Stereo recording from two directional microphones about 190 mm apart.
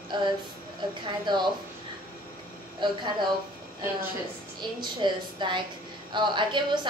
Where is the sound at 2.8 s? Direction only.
25° right (ahead or behind).